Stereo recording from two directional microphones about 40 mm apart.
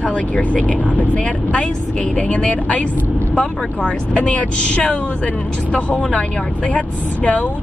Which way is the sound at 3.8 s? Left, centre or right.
Left.